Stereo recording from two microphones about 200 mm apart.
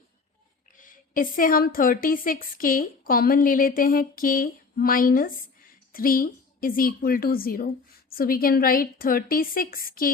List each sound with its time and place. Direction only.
0.8 s a woman's voice: 45° left (ahead or behind)